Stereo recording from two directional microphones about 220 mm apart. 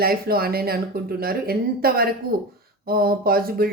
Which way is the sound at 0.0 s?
45° right (ahead or behind).